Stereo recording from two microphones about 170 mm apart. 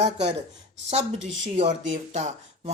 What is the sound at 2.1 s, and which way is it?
Speech, 40° right (ahead or behind).